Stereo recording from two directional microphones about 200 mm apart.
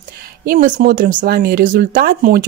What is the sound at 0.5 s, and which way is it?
Speech, 40° right (ahead or behind).